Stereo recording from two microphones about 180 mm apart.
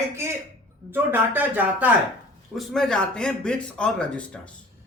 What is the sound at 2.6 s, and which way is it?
A man's voice, 5° left (ahead or behind).